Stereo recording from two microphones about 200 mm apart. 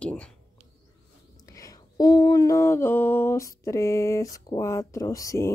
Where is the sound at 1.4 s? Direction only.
15° left (ahead or behind).